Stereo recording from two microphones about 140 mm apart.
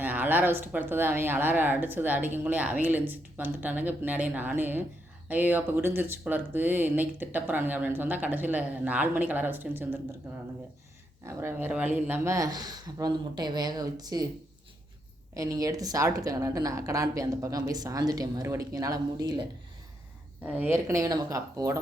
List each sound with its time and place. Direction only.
0.0 s speech: 15° right (ahead or behind)
11.3 s a woman's voice: 20° right (ahead or behind)
15.4 s a woman's voice: 25° right (ahead or behind)
20.4 s a woman's voice: 10° right (ahead or behind)